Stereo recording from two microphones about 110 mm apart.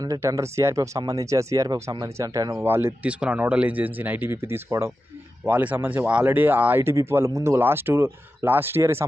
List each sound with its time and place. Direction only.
0.0 s speech: 30° right (ahead or behind)
2.6 s speech: 20° right (ahead or behind)